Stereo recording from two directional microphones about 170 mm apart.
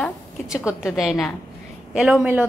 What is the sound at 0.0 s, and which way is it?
A woman's voice, 5° right (ahead or behind).